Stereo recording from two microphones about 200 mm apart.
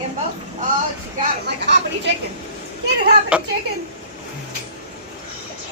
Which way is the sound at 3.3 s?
5° right (ahead or behind).